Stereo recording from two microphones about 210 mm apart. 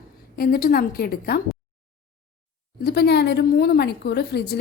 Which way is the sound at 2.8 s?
50° left (ahead or behind).